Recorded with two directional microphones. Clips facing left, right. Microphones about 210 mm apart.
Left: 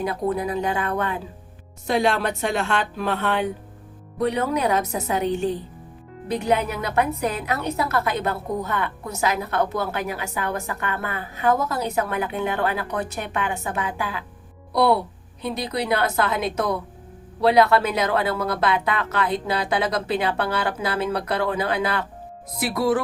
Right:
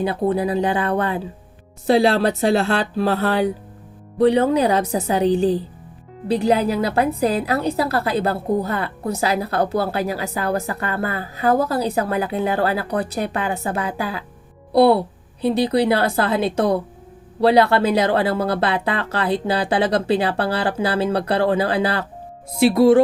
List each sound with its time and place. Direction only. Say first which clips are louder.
0.0 s a woman's voice: right 4 dB; 30° right (ahead or behind)